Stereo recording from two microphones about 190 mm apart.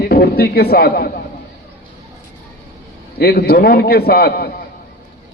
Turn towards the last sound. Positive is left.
turn(degrees=55)  # may be behind; listen again after turning